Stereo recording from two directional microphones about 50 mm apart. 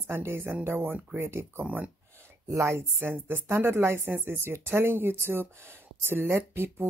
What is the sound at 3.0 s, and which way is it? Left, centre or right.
Speech, right.